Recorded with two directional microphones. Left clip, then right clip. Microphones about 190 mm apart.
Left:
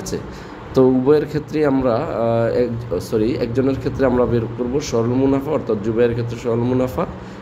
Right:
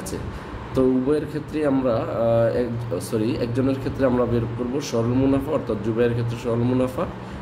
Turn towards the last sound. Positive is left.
turn(degrees=20)  # may be behind; listen again after turning